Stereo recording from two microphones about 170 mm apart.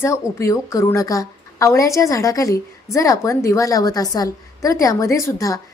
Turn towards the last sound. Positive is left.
turn(degrees=20)  # may be behind; listen again after turning